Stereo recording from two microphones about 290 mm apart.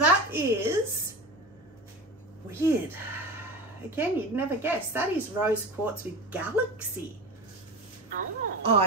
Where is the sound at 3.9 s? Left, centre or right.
Centre.